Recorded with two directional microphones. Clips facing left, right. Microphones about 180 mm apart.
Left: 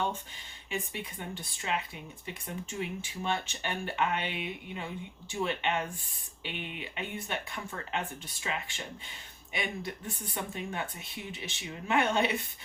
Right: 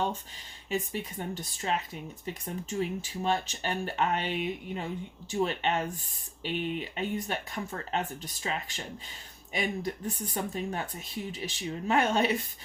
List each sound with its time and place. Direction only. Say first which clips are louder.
0.7 s speech: right 5 dB; 40° right (ahead or behind)